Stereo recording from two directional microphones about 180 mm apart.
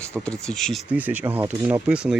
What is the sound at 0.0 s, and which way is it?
Speech, 5° left (ahead or behind).